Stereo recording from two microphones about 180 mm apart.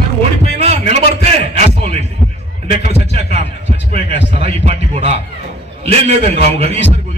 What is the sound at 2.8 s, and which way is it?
Speech, 35° right (ahead or behind).